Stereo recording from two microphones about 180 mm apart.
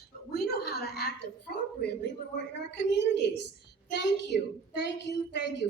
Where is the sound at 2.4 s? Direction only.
70° left (ahead or behind).